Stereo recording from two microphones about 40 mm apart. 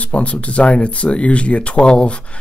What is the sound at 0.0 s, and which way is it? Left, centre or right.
Speech, left.